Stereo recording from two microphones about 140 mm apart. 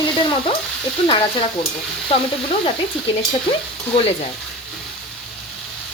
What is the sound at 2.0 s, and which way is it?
Frying, 45° left (ahead or behind).